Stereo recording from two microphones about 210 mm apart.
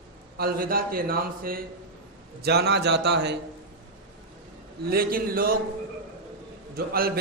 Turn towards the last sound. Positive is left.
turn(degrees=-45)  # may be behind; listen again after turning